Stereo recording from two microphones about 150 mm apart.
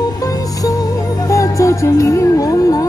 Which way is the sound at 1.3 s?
20° left (ahead or behind).